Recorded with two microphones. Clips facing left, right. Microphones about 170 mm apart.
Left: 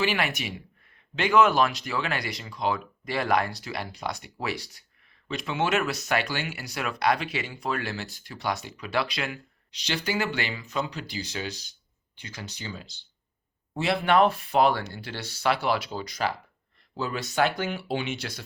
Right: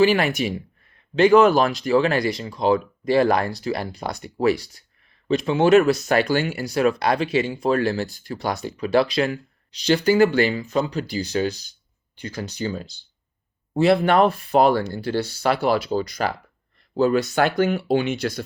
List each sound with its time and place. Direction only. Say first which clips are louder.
0.0 s speech: right 10 dB; 35° right (ahead or behind)